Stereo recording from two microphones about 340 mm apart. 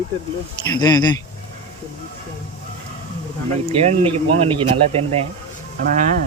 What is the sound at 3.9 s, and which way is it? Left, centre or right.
Speech, centre.